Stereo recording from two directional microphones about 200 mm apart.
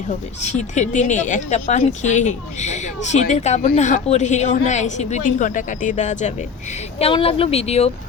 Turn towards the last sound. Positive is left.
turn(degrees=30)  # may be behind; listen again after turning